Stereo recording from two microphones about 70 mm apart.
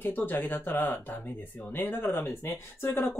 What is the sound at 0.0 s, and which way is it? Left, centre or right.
Speech, left.